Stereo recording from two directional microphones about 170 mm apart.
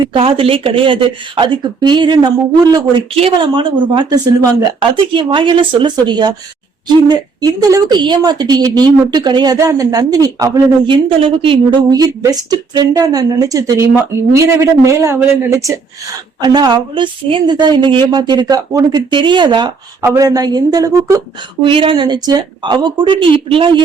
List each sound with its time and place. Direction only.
0.0 s a woman's voice: 30° right (ahead or behind)